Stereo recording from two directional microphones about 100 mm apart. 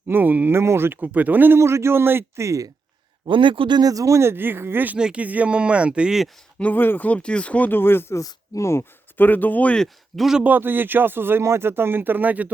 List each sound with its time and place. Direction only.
0.1 s speech: 20° right (ahead or behind)
3.2 s a man's voice: 55° right (ahead or behind)
3.8 s speech: 35° right (ahead or behind); by 6.2 s 10° right (ahead or behind)
6.6 s speech: 15° left (ahead or behind); by 10.4 s centre (ahead or behind)
10.4 s speech: 20° right (ahead or behind)